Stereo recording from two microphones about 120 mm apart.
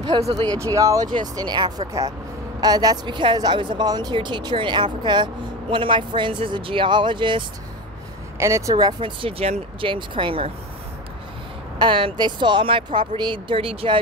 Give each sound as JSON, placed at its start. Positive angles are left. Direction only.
{"t": 0.1, "sound": "speech", "side_deg": -40}
{"t": 0.6, "sound": "speech", "side_deg": -25}
{"t": 8.4, "sound": "speech", "side_deg": -25}
{"t": 9.2, "sound": "speech", "side_deg": -50}
{"t": 11.8, "sound": "speech", "side_deg": -45}